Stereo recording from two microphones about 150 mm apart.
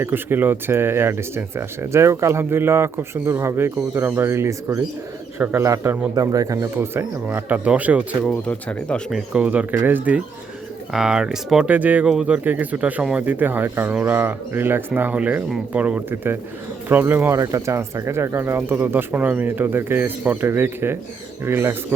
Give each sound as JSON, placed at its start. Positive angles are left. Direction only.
{"t": 0.0, "sound": "speech", "side_deg": -15}
{"t": 8.2, "sound": "speech", "side_deg": 10}
{"t": 9.1, "sound": "speech", "side_deg": -5}